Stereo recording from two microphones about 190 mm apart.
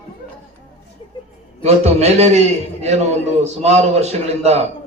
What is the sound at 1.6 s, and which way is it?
Speech, 35° right (ahead or behind).